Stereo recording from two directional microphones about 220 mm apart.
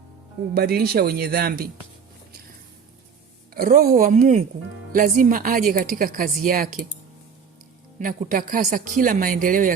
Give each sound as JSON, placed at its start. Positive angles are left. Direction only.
{"t": 0.5, "sound": "speech", "side_deg": -45}
{"t": 3.5, "sound": "a woman's voice", "side_deg": -40}
{"t": 7.9, "sound": "a woman's voice", "side_deg": -40}